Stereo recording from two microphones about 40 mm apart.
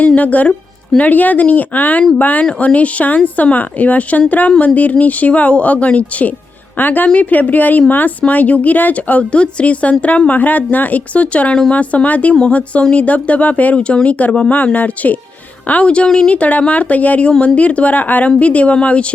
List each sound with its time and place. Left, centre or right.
0.2 s speech: left
2.4 s speech: left
6.7 s speech: left
13.7 s speech: left